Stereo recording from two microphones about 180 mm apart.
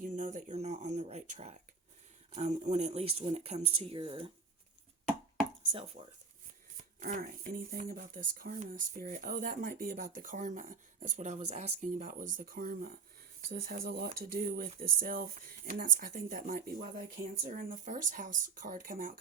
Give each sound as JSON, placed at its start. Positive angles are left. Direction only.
{"t": 0.0, "sound": "a sound", "side_deg": -45}
{"t": 2.3, "sound": "speech", "side_deg": -40}
{"t": 6.0, "sound": "speech", "side_deg": -50}